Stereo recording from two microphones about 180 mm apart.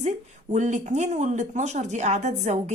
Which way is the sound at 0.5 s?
40° right (ahead or behind).